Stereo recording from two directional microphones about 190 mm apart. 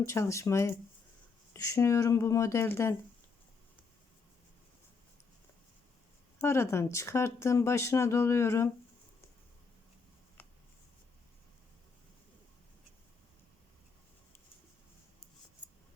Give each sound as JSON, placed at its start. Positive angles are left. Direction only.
{"t": 0.1, "sound": "speech", "side_deg": 15}
{"t": 6.4, "sound": "speech", "side_deg": 15}
{"t": 10.4, "sound": "a sound", "side_deg": 10}